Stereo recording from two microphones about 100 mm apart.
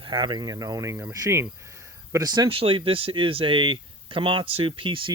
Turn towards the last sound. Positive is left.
turn(degrees=-60)  # may be behind; listen again after turning